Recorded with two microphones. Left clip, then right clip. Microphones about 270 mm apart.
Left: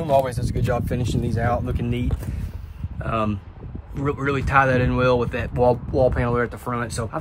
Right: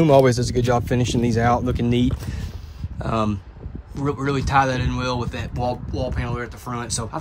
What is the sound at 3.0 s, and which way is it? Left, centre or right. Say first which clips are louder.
Speech: right 1 dB; centre.